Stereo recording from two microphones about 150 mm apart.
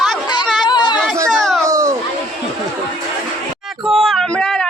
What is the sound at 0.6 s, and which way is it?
Chatter, 30° left (ahead or behind).